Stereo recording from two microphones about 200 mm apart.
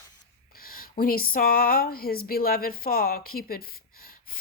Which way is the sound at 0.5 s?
45° left (ahead or behind).